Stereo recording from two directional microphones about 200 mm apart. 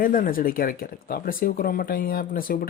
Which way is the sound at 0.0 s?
45° left (ahead or behind).